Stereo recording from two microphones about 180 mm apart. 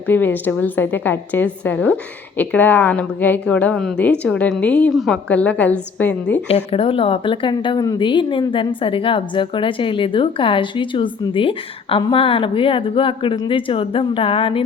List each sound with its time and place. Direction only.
0.1 s a woman's voice: 10° left (ahead or behind)
6.7 s a woman's voice: 30° left (ahead or behind)